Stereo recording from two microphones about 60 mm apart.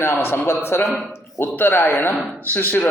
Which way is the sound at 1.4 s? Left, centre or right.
Left.